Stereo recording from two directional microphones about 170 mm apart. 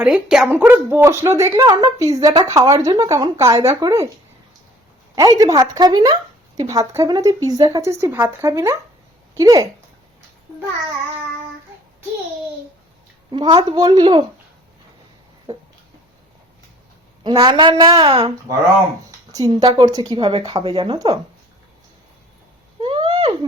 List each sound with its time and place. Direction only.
0.0 s speech: 5° right (ahead or behind); by 4.0 s 20° right (ahead or behind)
5.4 s speech: 20° right (ahead or behind)
13.3 s speech: 25° right (ahead or behind)
17.2 s a woman's voice: 30° right (ahead or behind)
22.8 s a sound: 25° right (ahead or behind)